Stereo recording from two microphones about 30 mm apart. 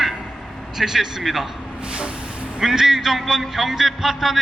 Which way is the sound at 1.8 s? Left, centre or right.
Right.